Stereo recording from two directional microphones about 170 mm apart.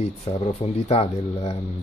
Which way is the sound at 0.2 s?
35° left (ahead or behind).